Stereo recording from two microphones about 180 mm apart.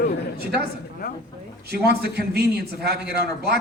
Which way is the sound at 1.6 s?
60° right (ahead or behind).